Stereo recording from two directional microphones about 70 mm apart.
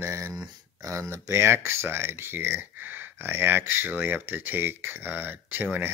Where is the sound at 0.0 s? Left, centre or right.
Right.